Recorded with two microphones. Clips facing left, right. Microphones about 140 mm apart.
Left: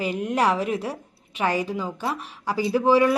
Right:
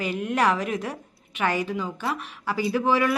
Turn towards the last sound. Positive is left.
turn(degrees=35)  # may be behind; listen again after turning